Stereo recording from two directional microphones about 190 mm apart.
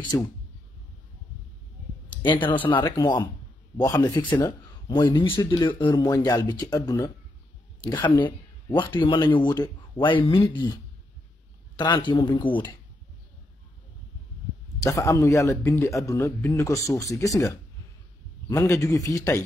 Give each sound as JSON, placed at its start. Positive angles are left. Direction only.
{"t": 0.1, "sound": "speech", "side_deg": 15}
{"t": 2.4, "sound": "speech", "side_deg": 25}
{"t": 8.7, "sound": "speech", "side_deg": 25}
{"t": 14.8, "sound": "speech", "side_deg": 15}